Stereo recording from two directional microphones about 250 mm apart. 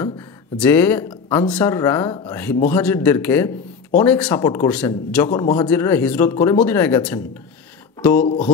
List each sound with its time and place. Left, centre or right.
0.6 s a man's voice: centre
5.4 s a man's voice: centre